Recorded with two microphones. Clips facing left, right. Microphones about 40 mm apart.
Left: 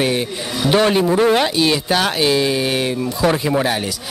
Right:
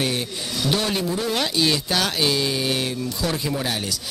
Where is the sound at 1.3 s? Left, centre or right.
Left.